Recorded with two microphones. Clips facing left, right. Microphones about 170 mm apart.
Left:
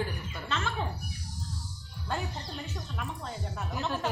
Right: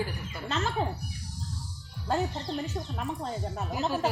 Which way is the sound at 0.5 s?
35° right (ahead or behind).